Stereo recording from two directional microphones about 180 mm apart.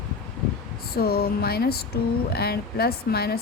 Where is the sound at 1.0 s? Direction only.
60° left (ahead or behind).